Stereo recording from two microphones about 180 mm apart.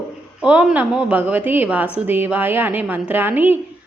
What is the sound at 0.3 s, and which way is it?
Speech, 5° right (ahead or behind).